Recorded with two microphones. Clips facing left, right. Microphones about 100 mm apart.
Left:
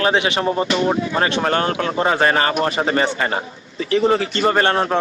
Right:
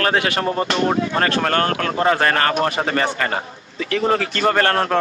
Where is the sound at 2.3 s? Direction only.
55° right (ahead or behind).